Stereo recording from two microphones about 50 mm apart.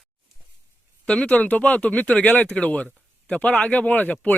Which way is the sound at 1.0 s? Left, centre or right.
Left.